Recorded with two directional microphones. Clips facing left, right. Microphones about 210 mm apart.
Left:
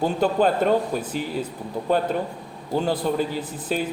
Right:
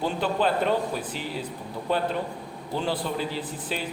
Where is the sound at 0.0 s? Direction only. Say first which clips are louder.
Left 5 dB; 45° left (ahead or behind).